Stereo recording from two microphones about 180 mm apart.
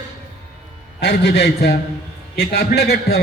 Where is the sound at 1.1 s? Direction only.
70° left (ahead or behind).